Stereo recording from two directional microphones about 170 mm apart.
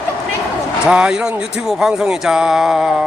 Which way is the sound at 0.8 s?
5° right (ahead or behind).